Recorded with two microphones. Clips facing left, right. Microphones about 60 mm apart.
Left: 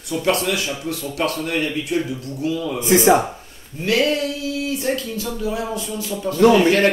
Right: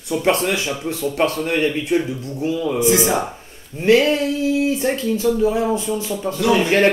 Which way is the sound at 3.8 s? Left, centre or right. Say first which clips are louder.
Right 4 dB; right.